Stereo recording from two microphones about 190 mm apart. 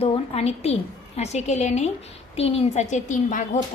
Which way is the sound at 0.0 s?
35° left (ahead or behind).